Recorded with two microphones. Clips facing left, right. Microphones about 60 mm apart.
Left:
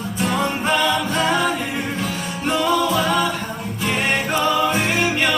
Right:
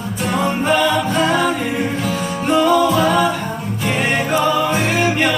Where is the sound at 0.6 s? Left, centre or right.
Centre.